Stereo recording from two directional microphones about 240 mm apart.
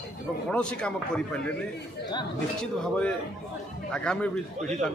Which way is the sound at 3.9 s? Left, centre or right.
Centre.